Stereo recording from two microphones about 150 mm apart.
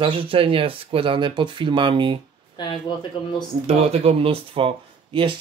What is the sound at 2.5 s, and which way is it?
Speech, 30° left (ahead or behind).